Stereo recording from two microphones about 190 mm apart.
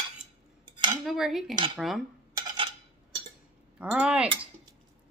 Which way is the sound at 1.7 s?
Centre (ahead or behind).